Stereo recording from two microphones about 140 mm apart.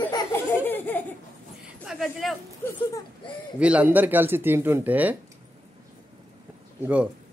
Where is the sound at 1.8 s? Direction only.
5° right (ahead or behind).